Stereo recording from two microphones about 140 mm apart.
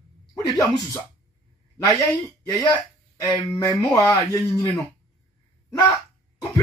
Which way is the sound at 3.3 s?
25° left (ahead or behind).